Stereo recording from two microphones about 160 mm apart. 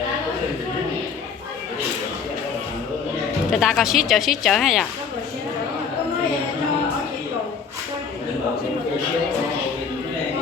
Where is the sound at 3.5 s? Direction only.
Centre (ahead or behind).